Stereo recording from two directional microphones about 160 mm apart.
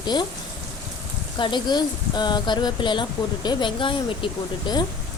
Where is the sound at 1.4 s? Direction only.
30° left (ahead or behind).